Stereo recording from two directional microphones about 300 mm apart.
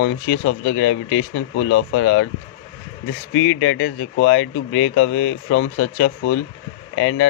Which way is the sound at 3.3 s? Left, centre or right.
Left.